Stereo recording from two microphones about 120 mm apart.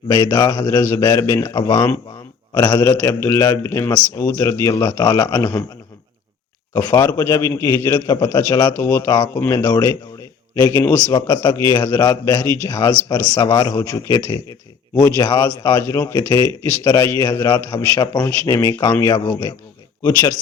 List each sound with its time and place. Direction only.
0.3 s a man's voice: 30° left (ahead or behind)
6.7 s a man's voice: 30° left (ahead or behind)
9.0 s a man's voice: 35° left (ahead or behind)
16.3 s a man's voice: 35° left (ahead or behind)
19.1 s speech: 35° left (ahead or behind)